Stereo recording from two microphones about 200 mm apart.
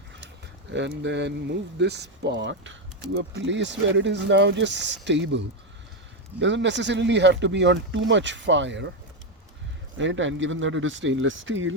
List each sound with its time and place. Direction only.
0.7 s speech: 60° right (ahead or behind)
6.4 s speech: 65° right (ahead or behind)
10.0 s speech: 70° right (ahead or behind)